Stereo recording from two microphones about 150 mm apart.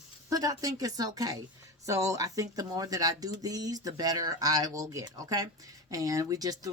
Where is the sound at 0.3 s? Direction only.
25° right (ahead or behind).